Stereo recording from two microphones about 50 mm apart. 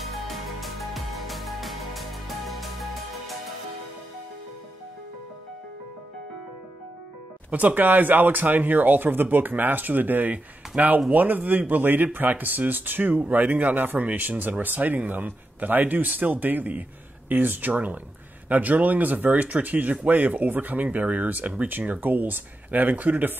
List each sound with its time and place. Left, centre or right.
0.0 s music: centre
7.5 s speech: right